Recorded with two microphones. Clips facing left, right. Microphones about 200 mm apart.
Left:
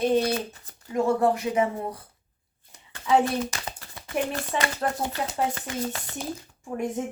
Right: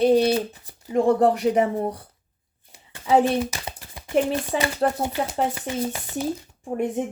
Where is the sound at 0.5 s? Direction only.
15° right (ahead or behind).